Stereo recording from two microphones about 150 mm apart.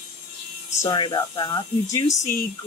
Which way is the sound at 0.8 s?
30° left (ahead or behind).